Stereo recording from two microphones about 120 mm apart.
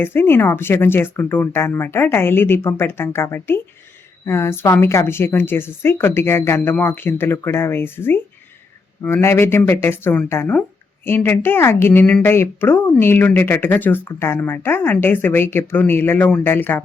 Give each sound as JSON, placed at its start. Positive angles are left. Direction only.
{"t": 0.0, "sound": "a woman's voice", "side_deg": 20}